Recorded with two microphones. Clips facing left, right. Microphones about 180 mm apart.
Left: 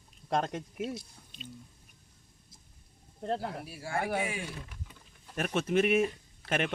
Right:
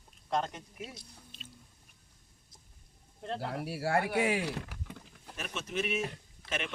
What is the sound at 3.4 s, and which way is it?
Speech, 70° right (ahead or behind).